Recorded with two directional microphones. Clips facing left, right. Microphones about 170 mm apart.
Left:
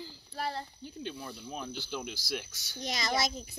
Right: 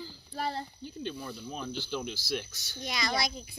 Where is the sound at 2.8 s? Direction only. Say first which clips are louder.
Right 1 dB; 45° left (ahead or behind).